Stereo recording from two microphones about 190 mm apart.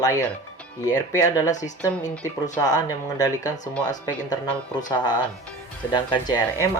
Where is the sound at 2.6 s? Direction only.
20° left (ahead or behind).